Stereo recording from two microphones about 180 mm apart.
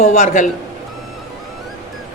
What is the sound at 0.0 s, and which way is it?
Speech, 40° left (ahead or behind).